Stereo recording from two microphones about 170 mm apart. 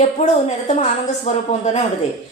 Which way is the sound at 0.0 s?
40° left (ahead or behind).